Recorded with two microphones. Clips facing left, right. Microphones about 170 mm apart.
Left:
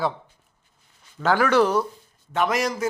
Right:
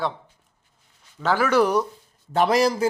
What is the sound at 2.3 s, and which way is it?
Speech, 35° right (ahead or behind).